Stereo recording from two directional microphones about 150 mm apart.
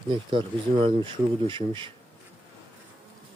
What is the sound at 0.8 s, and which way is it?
Speech, 35° right (ahead or behind).